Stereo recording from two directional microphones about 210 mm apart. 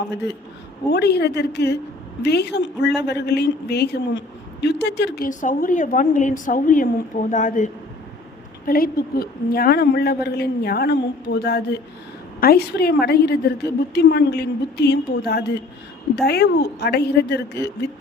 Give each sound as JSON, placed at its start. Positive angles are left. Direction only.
{"t": 0.9, "sound": "a woman's voice", "side_deg": 50}